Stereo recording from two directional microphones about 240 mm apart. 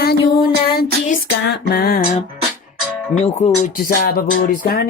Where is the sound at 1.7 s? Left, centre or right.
Left.